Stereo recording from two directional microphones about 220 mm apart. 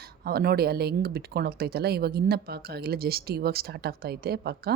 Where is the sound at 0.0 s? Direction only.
45° right (ahead or behind).